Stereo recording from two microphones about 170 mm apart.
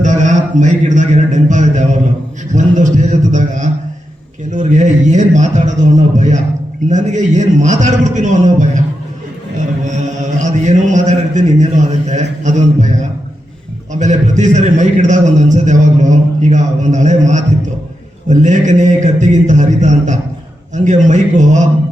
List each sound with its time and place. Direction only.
0.0 s a man's voice: 45° right (ahead or behind)
14.0 s a man's voice: 45° right (ahead or behind)